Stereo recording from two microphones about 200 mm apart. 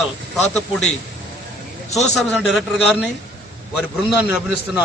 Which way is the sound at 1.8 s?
35° left (ahead or behind).